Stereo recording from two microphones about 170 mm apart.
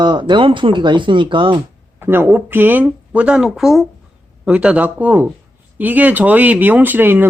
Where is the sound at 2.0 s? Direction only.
10° right (ahead or behind).